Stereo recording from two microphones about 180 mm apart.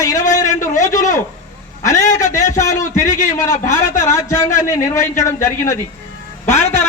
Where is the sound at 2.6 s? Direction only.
15° left (ahead or behind).